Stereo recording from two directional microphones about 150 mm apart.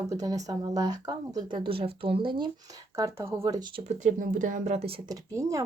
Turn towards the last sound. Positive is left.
turn(degrees=-20)  # may be behind; listen again after turning